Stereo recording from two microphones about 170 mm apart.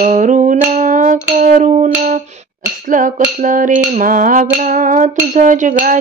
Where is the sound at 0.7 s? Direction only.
50° right (ahead or behind).